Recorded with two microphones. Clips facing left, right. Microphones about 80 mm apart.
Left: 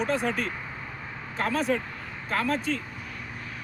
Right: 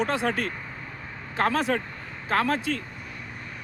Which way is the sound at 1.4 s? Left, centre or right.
Right.